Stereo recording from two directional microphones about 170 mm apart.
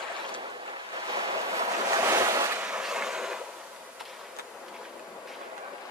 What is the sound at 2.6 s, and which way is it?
Vehicle, 5° right (ahead or behind).